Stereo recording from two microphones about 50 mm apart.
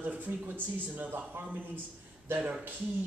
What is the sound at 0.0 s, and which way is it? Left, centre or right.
Speech, right.